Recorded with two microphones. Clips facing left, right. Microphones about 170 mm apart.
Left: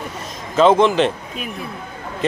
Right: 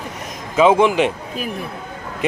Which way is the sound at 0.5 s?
10° right (ahead or behind).